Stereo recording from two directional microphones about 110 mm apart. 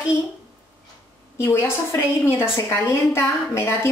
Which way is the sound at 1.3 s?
20° left (ahead or behind).